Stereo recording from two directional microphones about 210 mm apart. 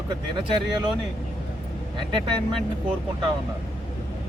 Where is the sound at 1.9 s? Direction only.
20° right (ahead or behind).